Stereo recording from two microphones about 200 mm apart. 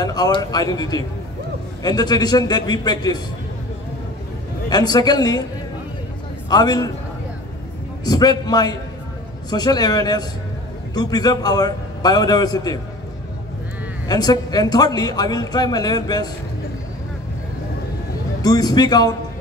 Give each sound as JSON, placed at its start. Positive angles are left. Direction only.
{"t": 0.0, "sound": "a man's voice", "side_deg": 20}
{"t": 4.6, "sound": "a man's voice", "side_deg": 20}
{"t": 6.5, "sound": "a man's voice", "side_deg": 20}
{"t": 8.0, "sound": "a man's voice", "side_deg": 20}
{"t": 14.0, "sound": "a man's voice", "side_deg": 20}
{"t": 18.4, "sound": "a man's voice", "side_deg": 20}